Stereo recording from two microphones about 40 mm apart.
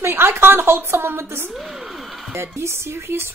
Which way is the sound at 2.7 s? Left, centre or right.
Right.